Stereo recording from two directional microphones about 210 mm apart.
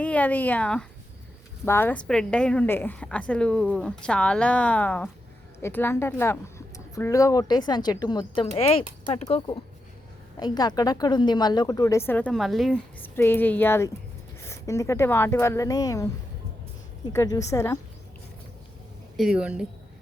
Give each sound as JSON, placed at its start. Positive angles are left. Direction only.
{"t": 0.0, "sound": "a woman's voice", "side_deg": 5}
{"t": 10.4, "sound": "speech", "side_deg": 20}
{"t": 17.1, "sound": "speech", "side_deg": 15}
{"t": 19.1, "sound": "a woman's voice", "side_deg": -5}